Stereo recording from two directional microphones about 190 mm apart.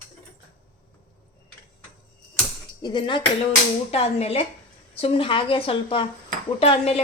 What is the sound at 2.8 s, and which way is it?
Speech, 25° left (ahead or behind).